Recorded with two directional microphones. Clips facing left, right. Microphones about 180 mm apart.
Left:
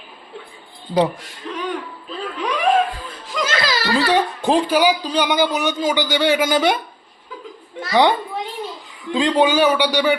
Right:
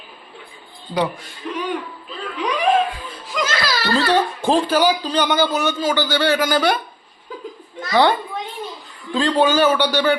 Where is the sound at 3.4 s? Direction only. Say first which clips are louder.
Left 2 dB; 20° left (ahead or behind).